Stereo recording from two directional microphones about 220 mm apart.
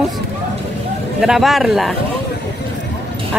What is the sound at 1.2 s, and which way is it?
Speech, centre (ahead or behind).